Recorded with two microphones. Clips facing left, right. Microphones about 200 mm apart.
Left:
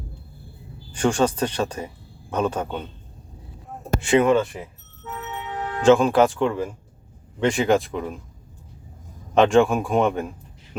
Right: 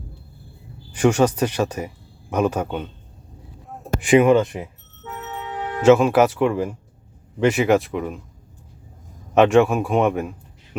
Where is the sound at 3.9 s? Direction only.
15° right (ahead or behind).